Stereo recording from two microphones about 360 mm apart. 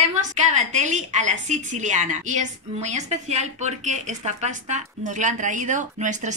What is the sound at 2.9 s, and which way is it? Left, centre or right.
Speech, centre.